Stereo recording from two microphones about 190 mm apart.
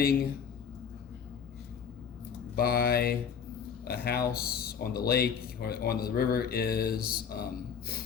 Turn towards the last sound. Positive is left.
turn(degrees=55)  # may be behind; listen again after turning